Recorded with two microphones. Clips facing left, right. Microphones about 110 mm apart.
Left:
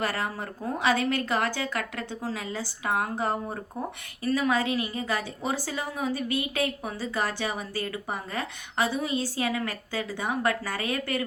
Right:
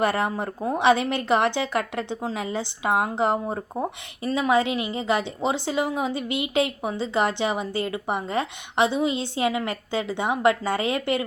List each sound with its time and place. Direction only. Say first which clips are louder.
0.0 s a woman's voice: right 7 dB; 25° right (ahead or behind)